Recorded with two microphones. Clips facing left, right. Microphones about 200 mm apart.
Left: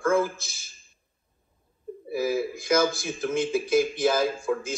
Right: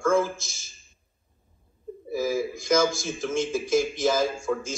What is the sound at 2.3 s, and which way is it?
A man's voice, 60° left (ahead or behind).